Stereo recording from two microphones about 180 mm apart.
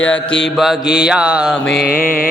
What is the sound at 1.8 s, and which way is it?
Mantra, 55° left (ahead or behind).